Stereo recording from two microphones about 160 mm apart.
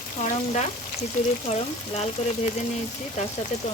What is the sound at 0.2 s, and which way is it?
Speech, 50° left (ahead or behind).